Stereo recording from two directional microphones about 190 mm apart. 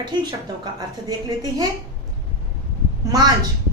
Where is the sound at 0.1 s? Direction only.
20° right (ahead or behind).